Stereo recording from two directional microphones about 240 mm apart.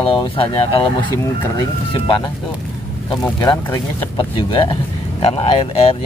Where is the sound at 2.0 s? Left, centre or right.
Left.